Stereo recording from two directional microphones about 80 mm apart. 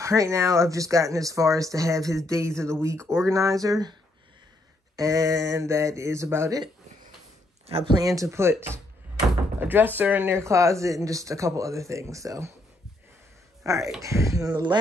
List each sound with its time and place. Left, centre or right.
0.0 s speech: right
4.9 s speech: right
7.9 s speech: right
13.7 s speech: right
14.5 s speech: right